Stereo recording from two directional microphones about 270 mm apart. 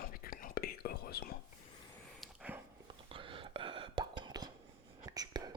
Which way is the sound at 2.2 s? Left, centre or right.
Centre.